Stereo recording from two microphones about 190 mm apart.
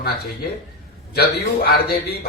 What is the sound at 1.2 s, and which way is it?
A man's voice, 55° left (ahead or behind).